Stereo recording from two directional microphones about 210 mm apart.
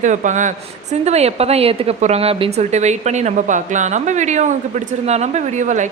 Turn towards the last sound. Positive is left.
turn(degrees=-35)  # may be behind; listen again after turning